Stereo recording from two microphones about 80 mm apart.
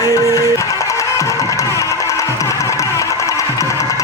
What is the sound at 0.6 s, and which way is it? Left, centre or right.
Music, left.